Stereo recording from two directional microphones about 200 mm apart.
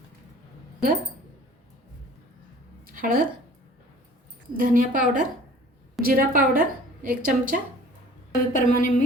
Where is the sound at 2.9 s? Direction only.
45° right (ahead or behind).